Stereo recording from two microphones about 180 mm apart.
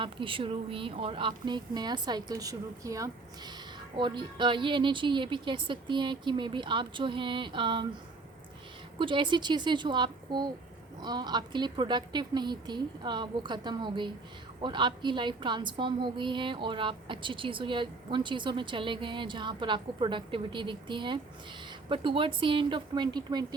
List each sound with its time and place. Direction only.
0.0 s a woman's voice: 30° right (ahead or behind)
9.0 s a woman's voice: 25° right (ahead or behind)